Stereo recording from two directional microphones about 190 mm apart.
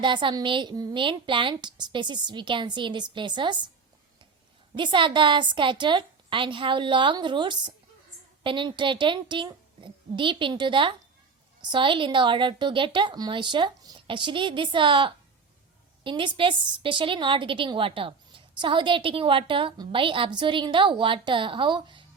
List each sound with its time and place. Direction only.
0.0 s a woman's voice: 25° right (ahead or behind)
4.8 s a woman's voice: 25° right (ahead or behind)